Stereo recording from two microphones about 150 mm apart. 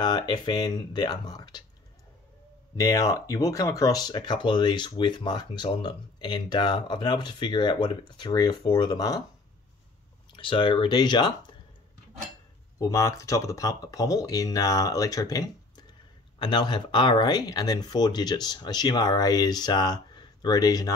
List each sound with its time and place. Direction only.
0.0 s speech: 30° left (ahead or behind)
2.7 s speech: 25° left (ahead or behind)
10.3 s speech: 30° left (ahead or behind)
12.7 s speech: 20° left (ahead or behind)